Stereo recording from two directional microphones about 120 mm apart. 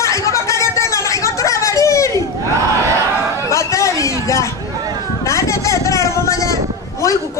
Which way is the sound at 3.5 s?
25° left (ahead or behind).